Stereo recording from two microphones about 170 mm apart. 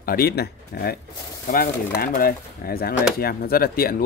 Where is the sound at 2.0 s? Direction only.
60° left (ahead or behind).